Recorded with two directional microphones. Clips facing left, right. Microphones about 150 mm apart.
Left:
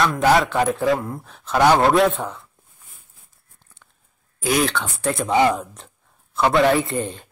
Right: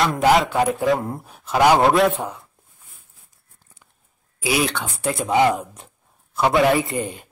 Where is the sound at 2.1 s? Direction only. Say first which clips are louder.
Right 1 dB; 10° right (ahead or behind).